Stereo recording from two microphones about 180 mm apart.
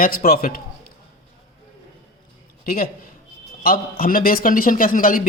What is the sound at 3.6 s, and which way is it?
A man's voice, 50° left (ahead or behind).